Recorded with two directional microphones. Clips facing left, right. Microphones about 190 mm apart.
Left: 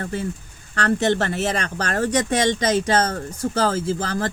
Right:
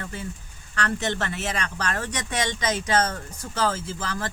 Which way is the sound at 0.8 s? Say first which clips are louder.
Left 7 dB; 35° left (ahead or behind).